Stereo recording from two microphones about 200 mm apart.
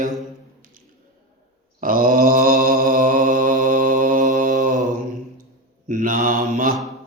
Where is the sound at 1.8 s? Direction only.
45° right (ahead or behind).